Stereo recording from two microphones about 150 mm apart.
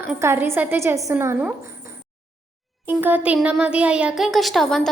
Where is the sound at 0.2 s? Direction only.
15° right (ahead or behind).